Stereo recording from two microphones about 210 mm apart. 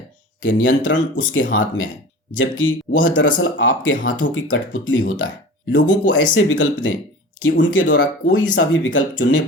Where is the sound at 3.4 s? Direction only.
70° left (ahead or behind).